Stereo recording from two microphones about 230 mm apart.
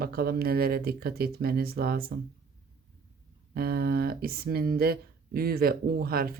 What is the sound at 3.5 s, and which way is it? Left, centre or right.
Speech, right.